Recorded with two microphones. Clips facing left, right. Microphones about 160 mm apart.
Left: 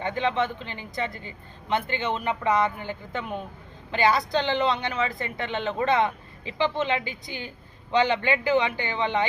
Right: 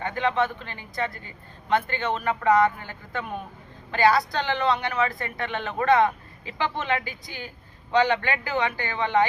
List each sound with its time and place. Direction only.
0.0 s a woman's voice: 20° left (ahead or behind)